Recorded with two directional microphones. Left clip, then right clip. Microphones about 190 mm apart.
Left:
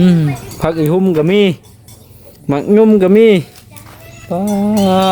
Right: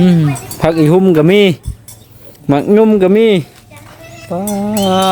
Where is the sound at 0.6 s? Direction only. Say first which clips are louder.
Right 4 dB; 30° right (ahead or behind).